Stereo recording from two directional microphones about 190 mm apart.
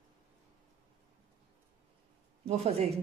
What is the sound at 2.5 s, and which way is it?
Speech, 35° right (ahead or behind).